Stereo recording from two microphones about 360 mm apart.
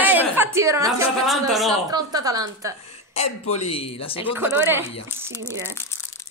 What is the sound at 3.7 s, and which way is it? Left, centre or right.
Speech, centre.